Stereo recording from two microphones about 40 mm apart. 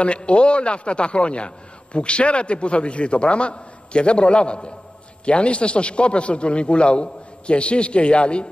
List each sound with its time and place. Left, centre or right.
0.0 s a man's voice: left